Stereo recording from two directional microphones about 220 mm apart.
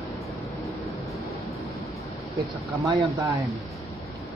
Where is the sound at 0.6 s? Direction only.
Centre (ahead or behind).